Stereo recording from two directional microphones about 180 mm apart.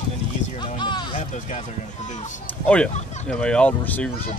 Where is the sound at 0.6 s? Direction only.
25° left (ahead or behind).